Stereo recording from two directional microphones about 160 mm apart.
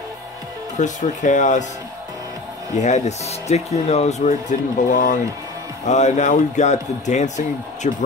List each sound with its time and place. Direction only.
0.7 s speech: 50° left (ahead or behind)
2.7 s speech: 45° left (ahead or behind)